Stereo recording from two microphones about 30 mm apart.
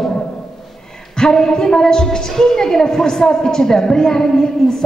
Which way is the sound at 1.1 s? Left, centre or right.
Centre.